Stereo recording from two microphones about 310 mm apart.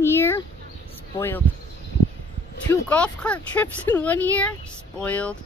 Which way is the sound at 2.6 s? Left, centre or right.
Centre.